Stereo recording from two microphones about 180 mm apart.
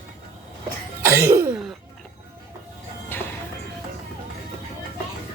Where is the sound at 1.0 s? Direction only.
15° right (ahead or behind).